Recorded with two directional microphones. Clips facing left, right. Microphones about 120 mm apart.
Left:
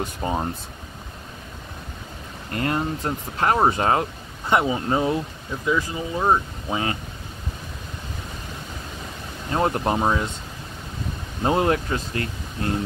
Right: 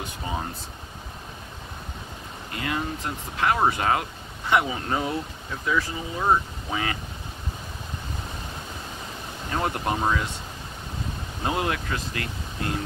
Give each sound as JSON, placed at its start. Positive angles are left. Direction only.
{"t": 0.2, "sound": "speech", "side_deg": 40}
{"t": 2.5, "sound": "speech", "side_deg": 40}
{"t": 3.5, "sound": "speech", "side_deg": 30}
{"t": 9.5, "sound": "speech", "side_deg": 30}
{"t": 11.4, "sound": "speech", "side_deg": 35}